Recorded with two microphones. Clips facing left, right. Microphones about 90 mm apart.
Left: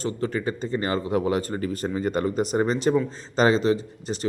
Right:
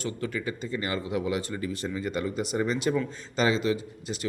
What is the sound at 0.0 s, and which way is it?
A man's voice, 35° left (ahead or behind).